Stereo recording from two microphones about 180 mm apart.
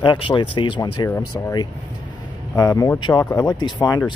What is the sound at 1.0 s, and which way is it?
Speech, 15° left (ahead or behind).